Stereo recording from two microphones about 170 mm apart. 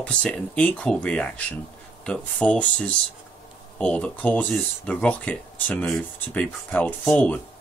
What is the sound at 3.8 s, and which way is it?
Speech, 5° left (ahead or behind).